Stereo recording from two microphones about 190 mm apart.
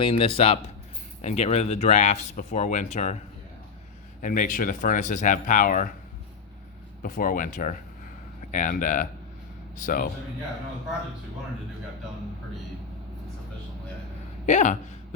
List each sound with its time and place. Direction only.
0.0 s speech: 30° left (ahead or behind)
4.2 s speech: 45° left (ahead or behind)
7.0 s speech: 45° left (ahead or behind)
14.4 s speech: 40° left (ahead or behind)